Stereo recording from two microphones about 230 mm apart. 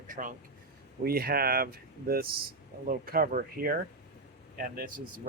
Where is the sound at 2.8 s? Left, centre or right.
Right.